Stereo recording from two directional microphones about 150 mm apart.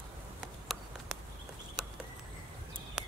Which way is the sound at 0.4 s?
Centre (ahead or behind).